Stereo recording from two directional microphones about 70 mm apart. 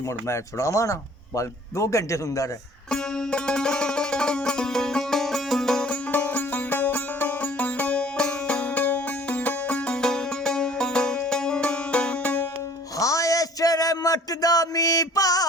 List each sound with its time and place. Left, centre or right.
0.3 s speech: left
2.9 s music: centre
5.9 s music: left
13.0 s a sound: left